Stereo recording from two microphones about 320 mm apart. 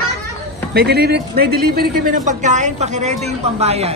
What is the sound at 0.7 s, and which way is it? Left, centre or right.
Speech, right.